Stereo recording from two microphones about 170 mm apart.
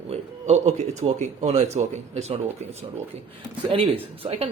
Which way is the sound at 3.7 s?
35° right (ahead or behind).